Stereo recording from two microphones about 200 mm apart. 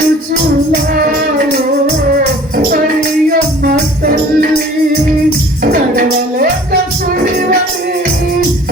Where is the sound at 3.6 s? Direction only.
45° right (ahead or behind).